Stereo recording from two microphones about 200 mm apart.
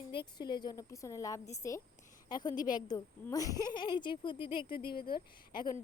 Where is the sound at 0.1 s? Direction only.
25° left (ahead or behind).